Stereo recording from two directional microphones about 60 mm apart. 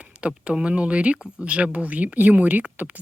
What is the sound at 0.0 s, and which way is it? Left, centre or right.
Speech, centre.